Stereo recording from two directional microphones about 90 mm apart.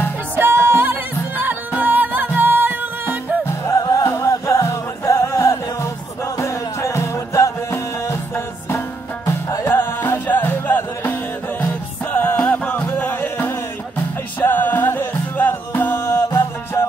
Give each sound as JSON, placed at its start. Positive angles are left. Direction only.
{"t": 0.4, "sound": "music", "side_deg": -25}
{"t": 3.8, "sound": "music", "side_deg": 40}
{"t": 9.7, "sound": "music", "side_deg": 25}